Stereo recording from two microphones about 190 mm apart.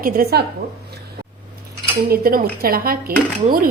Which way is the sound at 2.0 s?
50° right (ahead or behind).